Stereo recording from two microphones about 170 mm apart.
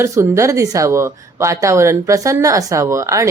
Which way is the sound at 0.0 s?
15° right (ahead or behind).